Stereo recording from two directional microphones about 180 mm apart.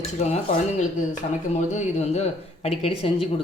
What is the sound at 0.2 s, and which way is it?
Speech, 35° left (ahead or behind).